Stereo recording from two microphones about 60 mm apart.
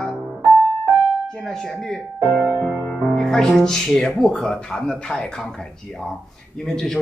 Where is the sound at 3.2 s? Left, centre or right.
Centre.